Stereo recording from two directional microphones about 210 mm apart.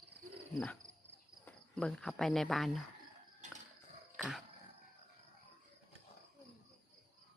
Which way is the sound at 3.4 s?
35° right (ahead or behind).